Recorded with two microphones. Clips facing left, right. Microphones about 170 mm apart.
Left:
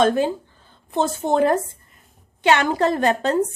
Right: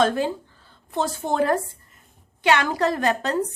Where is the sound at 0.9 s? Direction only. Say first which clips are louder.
Left 4 dB; 20° left (ahead or behind).